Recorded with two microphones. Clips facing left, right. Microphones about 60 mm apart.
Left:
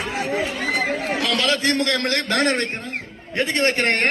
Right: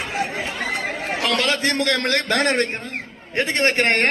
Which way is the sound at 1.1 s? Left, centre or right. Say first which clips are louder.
Right 2 dB; right.